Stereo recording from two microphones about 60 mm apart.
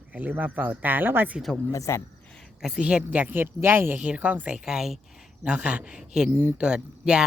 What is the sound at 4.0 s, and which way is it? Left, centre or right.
Speech, right.